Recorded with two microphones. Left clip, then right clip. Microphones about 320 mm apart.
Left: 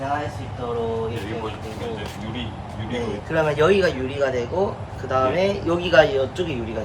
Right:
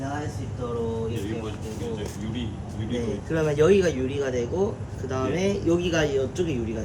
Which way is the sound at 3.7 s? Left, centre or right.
Centre.